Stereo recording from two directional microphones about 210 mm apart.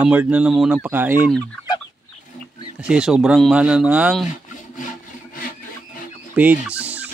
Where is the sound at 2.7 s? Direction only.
5° right (ahead or behind).